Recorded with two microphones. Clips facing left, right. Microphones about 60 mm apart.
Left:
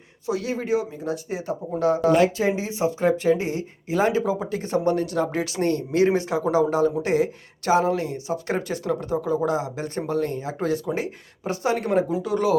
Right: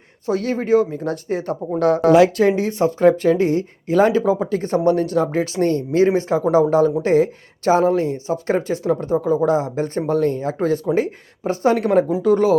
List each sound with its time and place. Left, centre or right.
0.3 s speech: right